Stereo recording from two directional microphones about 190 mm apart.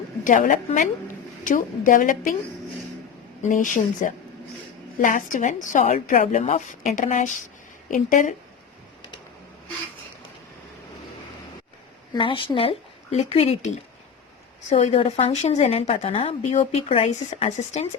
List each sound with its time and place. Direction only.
0.3 s a woman's voice: 45° left (ahead or behind)
3.4 s a woman's voice: 40° left (ahead or behind)
12.1 s speech: 25° left (ahead or behind)
14.7 s a woman's voice: 30° left (ahead or behind)